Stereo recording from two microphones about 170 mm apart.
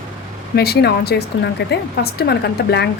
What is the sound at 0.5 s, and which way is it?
Speech, 70° left (ahead or behind).